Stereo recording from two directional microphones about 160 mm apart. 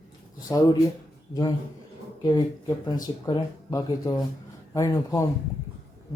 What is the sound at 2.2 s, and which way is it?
Speech, 25° left (ahead or behind).